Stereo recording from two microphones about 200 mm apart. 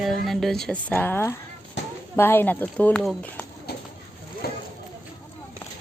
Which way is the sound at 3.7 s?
50° left (ahead or behind).